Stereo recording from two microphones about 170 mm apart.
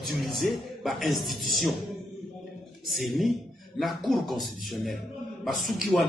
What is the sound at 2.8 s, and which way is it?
A man's voice, centre (ahead or behind).